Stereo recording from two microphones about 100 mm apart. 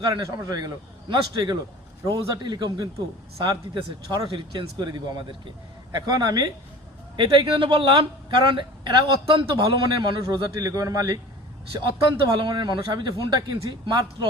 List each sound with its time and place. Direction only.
0.0 s a man's voice: 35° right (ahead or behind)
4.1 s a man's voice: 50° right (ahead or behind)
7.2 s a man's voice: 55° right (ahead or behind)
10.2 s a man's voice: 35° right (ahead or behind)